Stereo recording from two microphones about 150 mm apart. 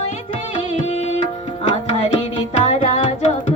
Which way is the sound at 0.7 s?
45° left (ahead or behind).